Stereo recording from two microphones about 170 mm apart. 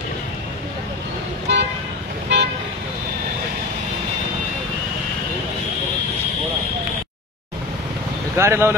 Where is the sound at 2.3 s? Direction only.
80° right.